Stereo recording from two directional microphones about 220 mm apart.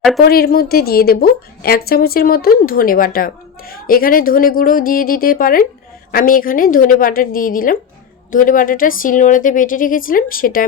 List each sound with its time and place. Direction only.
0.2 s a woman's voice: 45° left (ahead or behind)